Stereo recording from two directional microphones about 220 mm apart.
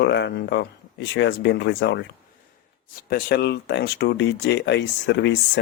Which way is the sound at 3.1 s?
45° left (ahead or behind).